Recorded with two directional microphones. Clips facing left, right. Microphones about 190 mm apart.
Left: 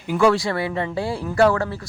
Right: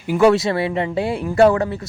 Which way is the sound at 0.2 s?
20° right (ahead or behind).